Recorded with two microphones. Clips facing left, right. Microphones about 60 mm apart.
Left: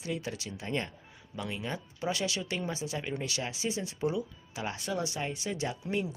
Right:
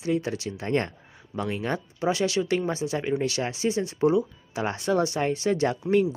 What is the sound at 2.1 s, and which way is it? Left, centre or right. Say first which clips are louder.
Speech: right 10 dB; right.